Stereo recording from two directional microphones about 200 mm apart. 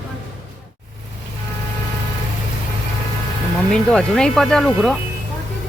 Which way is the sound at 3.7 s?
5° left (ahead or behind).